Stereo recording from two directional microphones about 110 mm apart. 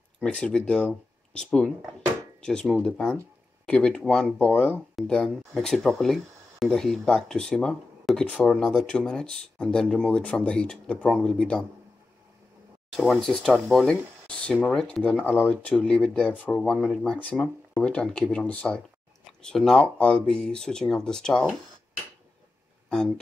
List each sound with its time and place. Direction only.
0.2 s speech: 10° left (ahead or behind)
12.9 s speech: centre (ahead or behind)
22.8 s speech: 5° left (ahead or behind)